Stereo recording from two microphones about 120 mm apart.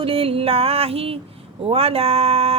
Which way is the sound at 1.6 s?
55° right (ahead or behind).